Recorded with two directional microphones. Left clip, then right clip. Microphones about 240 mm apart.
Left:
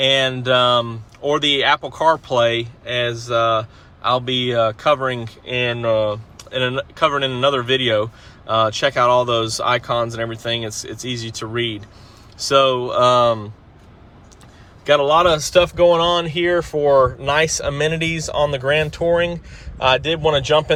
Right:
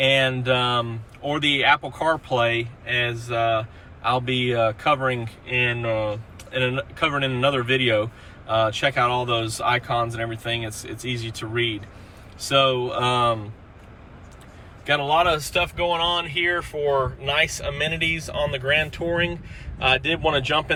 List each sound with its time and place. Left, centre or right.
0.0 s speech: centre
12.5 s speech: left
14.8 s speech: left; by 20.7 s centre